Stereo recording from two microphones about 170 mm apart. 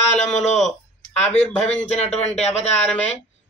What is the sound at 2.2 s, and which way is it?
Speech, 40° left (ahead or behind).